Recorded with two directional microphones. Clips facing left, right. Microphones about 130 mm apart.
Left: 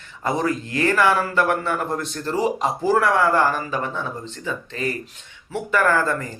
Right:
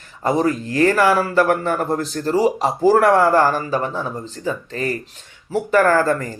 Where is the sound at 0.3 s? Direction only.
35° right (ahead or behind).